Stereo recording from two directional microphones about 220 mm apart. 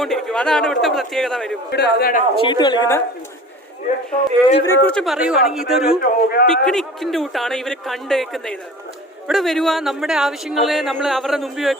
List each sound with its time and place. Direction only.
0.0 s speech: 5° left (ahead or behind)
1.7 s a man's voice: 50° left (ahead or behind)
2.3 s speech: 20° left (ahead or behind)
4.6 s speech: 10° left (ahead or behind)
6.0 s a man's voice: 45° left (ahead or behind)
6.5 s speech: centre (ahead or behind)